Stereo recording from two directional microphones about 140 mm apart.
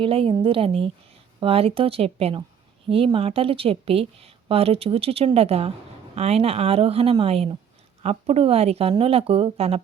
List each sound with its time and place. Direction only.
0.0 s a woman's voice: 40° right (ahead or behind)